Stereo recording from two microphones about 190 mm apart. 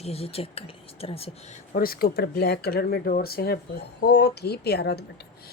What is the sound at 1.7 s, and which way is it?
Speech, 50° left (ahead or behind).